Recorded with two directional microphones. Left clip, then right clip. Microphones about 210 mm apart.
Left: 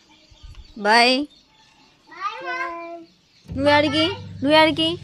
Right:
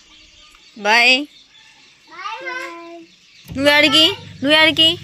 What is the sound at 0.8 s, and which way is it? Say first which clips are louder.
Speech: right 3 dB; 20° left (ahead or behind).